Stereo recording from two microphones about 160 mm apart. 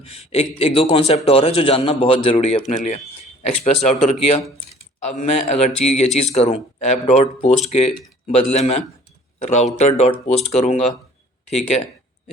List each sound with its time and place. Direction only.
0.1 s a man's voice: 40° left (ahead or behind)